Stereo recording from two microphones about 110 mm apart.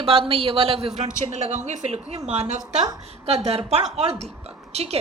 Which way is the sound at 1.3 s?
90° right.